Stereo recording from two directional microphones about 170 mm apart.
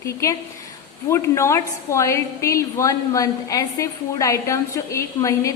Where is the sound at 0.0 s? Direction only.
15° left (ahead or behind).